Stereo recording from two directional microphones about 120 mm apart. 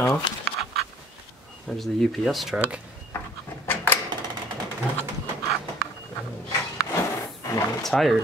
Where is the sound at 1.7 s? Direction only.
5° left (ahead or behind).